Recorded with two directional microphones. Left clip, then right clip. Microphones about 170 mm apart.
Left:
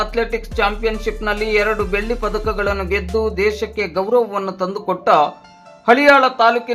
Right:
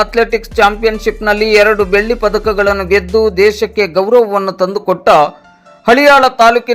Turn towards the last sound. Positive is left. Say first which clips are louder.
# right 6 dB
turn(degrees=-35)  # may be behind; listen again after turning